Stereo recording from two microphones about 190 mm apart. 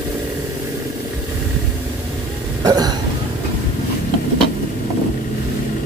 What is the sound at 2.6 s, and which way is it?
Hiccup, 20° right (ahead or behind).